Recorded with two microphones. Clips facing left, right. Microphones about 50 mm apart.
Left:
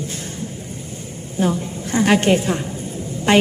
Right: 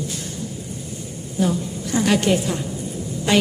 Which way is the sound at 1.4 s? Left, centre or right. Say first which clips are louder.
Left 1 dB; left.